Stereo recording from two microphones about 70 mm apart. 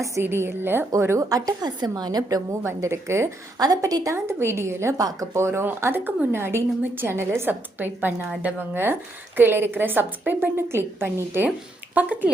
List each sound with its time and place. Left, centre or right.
0.2 s a woman's voice: right
1.3 s a woman's voice: right
2.5 s a woman's voice: right
3.6 s a woman's voice: right
4.1 s a woman's voice: right
4.9 s a woman's voice: right
5.3 s a woman's voice: right
7.8 s a woman's voice: right
11.9 s speech: right